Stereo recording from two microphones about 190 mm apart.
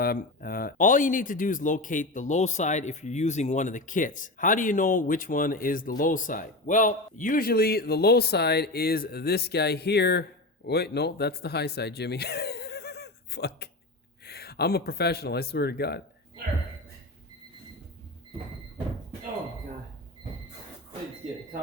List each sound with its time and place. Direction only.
0.0 s speech: 50° left (ahead or behind)